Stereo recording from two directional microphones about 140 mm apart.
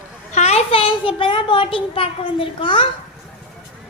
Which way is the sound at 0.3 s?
50° left (ahead or behind).